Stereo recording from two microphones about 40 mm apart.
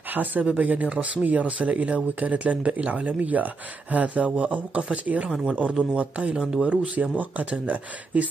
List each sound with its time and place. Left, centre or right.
0.1 s speech: right
0.8 s speech: right
5.3 s speech: centre
5.9 s speech: right
6.7 s speech: right